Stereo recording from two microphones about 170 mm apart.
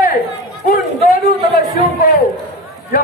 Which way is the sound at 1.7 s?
60° left (ahead or behind).